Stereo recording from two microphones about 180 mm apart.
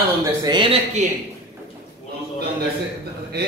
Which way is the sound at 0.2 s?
20° right (ahead or behind).